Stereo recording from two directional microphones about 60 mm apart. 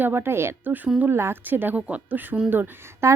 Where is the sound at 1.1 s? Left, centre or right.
Right.